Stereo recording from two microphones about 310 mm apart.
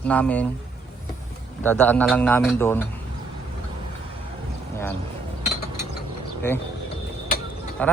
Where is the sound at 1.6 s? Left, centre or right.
Centre.